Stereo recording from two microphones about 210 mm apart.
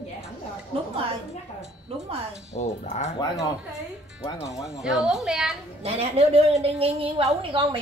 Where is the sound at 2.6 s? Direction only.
35° left (ahead or behind).